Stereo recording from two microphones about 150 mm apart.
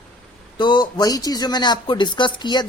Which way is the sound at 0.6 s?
30° left (ahead or behind).